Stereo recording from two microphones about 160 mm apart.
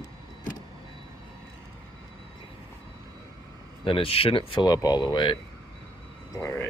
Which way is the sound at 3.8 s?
35° left (ahead or behind).